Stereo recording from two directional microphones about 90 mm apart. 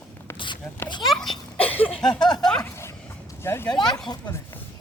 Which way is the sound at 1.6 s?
15° left (ahead or behind).